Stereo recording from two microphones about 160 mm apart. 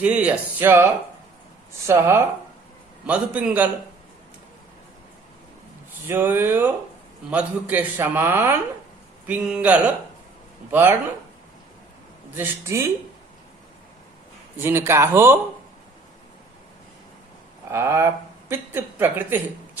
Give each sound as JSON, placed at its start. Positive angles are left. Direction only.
{"t": 0.0, "sound": "a man's voice", "side_deg": -10}
{"t": 1.9, "sound": "a man's voice", "side_deg": -15}
{"t": 6.1, "sound": "a man's voice", "side_deg": -15}
{"t": 12.4, "sound": "a man's voice", "side_deg": -15}
{"t": 14.5, "sound": "a man's voice", "side_deg": -15}
{"t": 17.7, "sound": "speech", "side_deg": -15}